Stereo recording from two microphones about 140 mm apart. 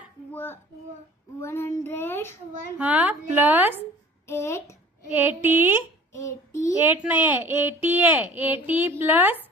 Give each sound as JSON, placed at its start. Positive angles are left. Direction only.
{"t": 0.3, "sound": "child singing", "side_deg": 15}
{"t": 2.7, "sound": "speech", "side_deg": -10}
{"t": 4.3, "sound": "child singing", "side_deg": 20}
{"t": 5.0, "sound": "speech", "side_deg": -15}
{"t": 6.1, "sound": "child singing", "side_deg": 20}
{"t": 6.7, "sound": "speech", "side_deg": -15}